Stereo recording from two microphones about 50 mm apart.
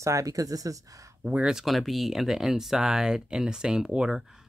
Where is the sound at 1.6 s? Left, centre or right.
Centre.